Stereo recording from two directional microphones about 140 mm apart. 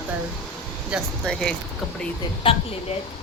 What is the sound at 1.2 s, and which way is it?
Speech, 5° left (ahead or behind).